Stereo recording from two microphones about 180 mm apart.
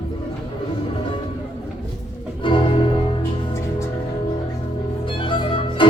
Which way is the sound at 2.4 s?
30° left (ahead or behind).